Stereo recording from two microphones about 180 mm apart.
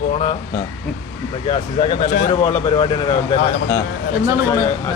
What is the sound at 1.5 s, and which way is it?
Speech, 35° left (ahead or behind).